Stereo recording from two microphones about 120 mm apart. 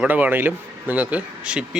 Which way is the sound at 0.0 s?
15° right (ahead or behind).